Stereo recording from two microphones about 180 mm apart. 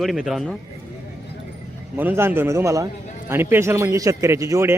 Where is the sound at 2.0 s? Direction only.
10° right (ahead or behind).